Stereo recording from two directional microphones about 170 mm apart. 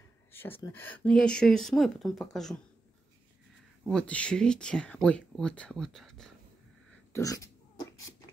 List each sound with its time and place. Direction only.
0.3 s a sound: 10° left (ahead or behind)
0.7 s speech: 10° left (ahead or behind)
3.8 s speech: 5° left (ahead or behind)
7.1 s beatboxing: 20° left (ahead or behind)